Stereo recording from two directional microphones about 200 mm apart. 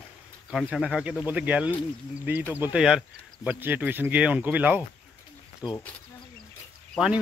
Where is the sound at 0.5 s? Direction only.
Centre (ahead or behind).